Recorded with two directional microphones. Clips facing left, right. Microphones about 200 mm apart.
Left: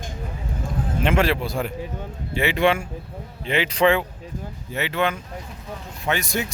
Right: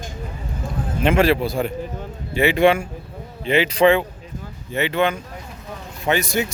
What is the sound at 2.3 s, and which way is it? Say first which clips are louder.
Speech: right 5 dB; 5° right (ahead or behind).